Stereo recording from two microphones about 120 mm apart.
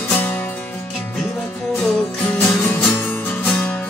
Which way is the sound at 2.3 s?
15° left (ahead or behind).